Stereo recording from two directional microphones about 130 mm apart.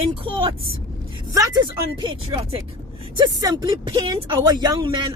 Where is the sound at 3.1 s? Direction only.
30° right (ahead or behind).